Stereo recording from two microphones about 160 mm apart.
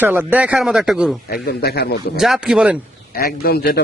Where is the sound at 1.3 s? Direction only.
70° left (ahead or behind).